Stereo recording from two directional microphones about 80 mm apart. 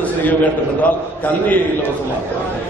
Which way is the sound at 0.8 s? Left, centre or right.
Left.